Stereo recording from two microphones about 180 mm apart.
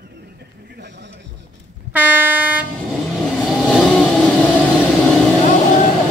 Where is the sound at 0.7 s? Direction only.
70° right (ahead or behind).